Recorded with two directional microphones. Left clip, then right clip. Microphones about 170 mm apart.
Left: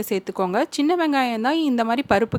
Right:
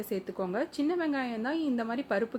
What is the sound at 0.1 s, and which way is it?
A woman's voice, 55° left (ahead or behind).